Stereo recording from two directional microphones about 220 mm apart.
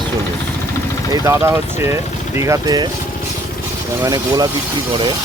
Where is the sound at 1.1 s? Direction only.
15° right (ahead or behind).